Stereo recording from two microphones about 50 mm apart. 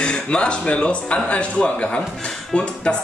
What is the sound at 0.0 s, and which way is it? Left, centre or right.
Speech, centre.